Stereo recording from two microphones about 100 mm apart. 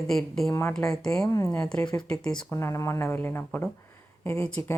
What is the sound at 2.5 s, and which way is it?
Speech, 25° left (ahead or behind).